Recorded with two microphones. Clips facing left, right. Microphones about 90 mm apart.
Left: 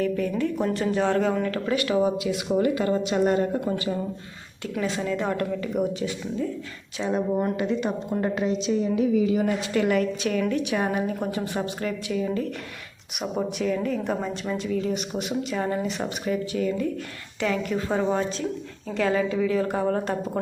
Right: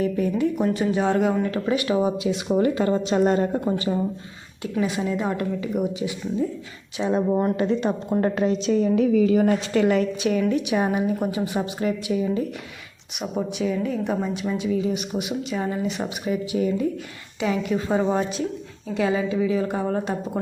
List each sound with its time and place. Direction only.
0.0 s speech: 20° right (ahead or behind)
4.8 s speech: 15° right (ahead or behind)
7.0 s a woman's voice: 25° right (ahead or behind); by 9.8 s 45° right (ahead or behind)
9.8 s speech: 25° right (ahead or behind)
13.3 s speech: centre (ahead or behind)
16.2 s speech: 10° right (ahead or behind)